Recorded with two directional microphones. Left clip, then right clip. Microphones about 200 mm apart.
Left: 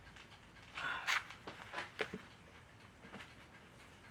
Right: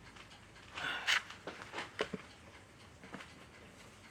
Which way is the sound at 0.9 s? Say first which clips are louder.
Right 4 dB; 25° right (ahead or behind).